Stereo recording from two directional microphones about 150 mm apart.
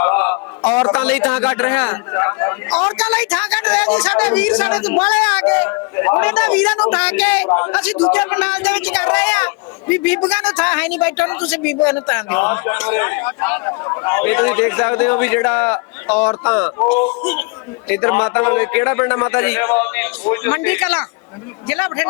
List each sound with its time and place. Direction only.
0.0 s a sound: 10° left (ahead or behind)
0.9 s a man's voice: 5° left (ahead or behind)
13.8 s speech: 25° left (ahead or behind)
14.1 s a man's voice: 10° left (ahead or behind)